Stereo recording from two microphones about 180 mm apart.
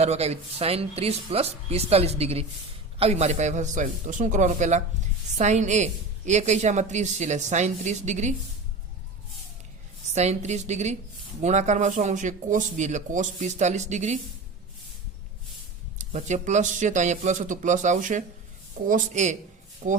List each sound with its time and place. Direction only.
0.0 s a woman's voice: 35° right (ahead or behind)
10.2 s a woman's voice: 40° right (ahead or behind)
16.0 s a man's voice: 40° right (ahead or behind)